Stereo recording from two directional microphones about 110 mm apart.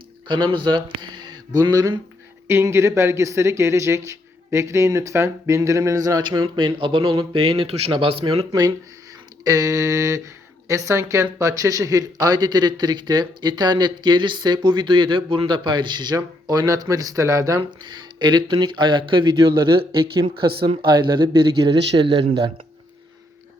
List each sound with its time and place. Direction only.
0.3 s speech: 45° right (ahead or behind)
2.5 s a man's voice: 25° right (ahead or behind); by 8.4 s 55° right (ahead or behind)
9.4 s speech: 35° right (ahead or behind)
17.6 s speech: 45° right (ahead or behind)